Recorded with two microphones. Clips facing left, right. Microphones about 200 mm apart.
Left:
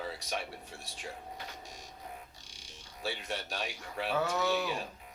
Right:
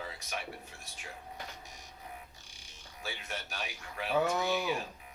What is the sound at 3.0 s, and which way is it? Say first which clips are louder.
Speech: left 4 dB; 35° left (ahead or behind).